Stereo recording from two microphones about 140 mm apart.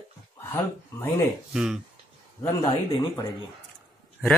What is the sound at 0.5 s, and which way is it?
Speech, 15° left (ahead or behind).